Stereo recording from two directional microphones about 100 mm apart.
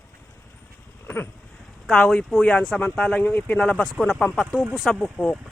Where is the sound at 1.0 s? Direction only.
20° left (ahead or behind).